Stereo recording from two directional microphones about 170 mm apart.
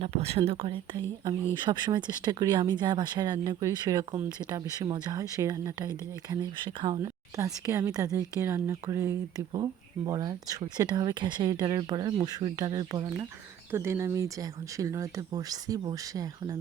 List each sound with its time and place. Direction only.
0.0 s speech: 35° right (ahead or behind)
13.7 s speech: 15° right (ahead or behind)